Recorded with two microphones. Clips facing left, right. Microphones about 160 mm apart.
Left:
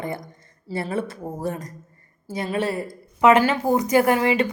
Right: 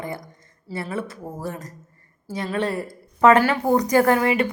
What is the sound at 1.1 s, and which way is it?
A woman's voice, 20° left (ahead or behind).